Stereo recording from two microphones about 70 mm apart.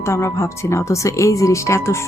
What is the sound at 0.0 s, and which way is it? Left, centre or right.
Speech, left.